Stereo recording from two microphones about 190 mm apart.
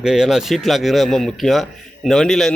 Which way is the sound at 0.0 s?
5° right (ahead or behind).